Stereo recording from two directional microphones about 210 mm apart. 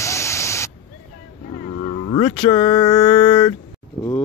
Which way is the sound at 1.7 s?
30° left (ahead or behind).